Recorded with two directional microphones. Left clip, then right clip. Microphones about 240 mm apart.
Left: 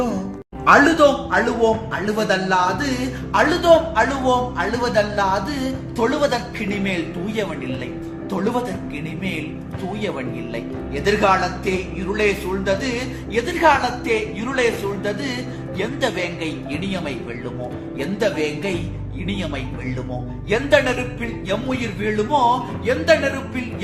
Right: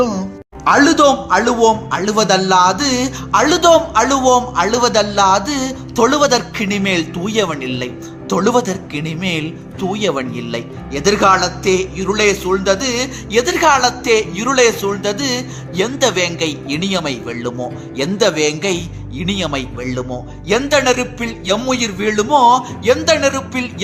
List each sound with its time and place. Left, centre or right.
0.6 s speech: right